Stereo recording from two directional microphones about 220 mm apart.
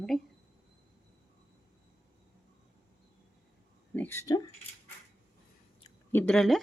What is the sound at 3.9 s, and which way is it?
Speech, 10° left (ahead or behind).